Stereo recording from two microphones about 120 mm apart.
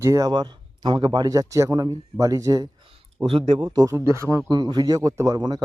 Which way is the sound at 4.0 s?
25° right (ahead or behind).